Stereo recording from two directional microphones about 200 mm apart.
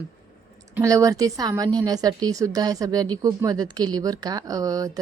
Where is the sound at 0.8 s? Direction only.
15° right (ahead or behind).